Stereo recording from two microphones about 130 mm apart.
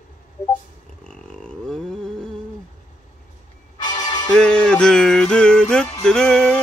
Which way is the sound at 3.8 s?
30° left (ahead or behind).